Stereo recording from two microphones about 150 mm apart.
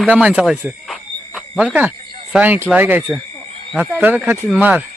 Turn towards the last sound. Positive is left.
turn(degrees=-10)  # may be behind; listen again after turning